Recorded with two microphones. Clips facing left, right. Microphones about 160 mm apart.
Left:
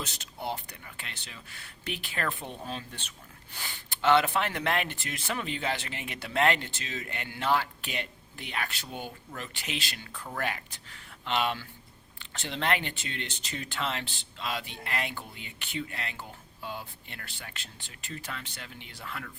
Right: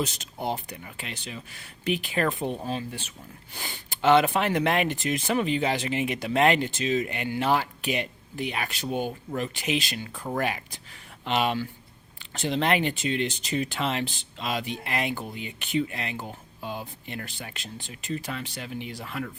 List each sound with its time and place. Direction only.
0.0 s speech: 15° right (ahead or behind)